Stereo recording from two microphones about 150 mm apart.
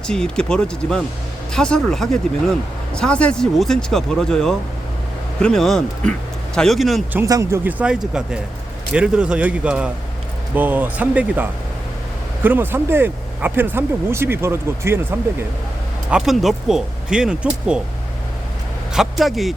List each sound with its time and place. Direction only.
0.1 s speech: 5° left (ahead or behind)
7.3 s speech: 25° right (ahead or behind)
7.6 s speech: 10° right (ahead or behind)
16.0 s speech: 5° right (ahead or behind)
18.9 s speech: centre (ahead or behind)